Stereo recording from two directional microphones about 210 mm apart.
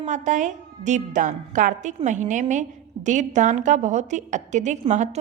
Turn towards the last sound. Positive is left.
turn(degrees=-35)  # may be behind; listen again after turning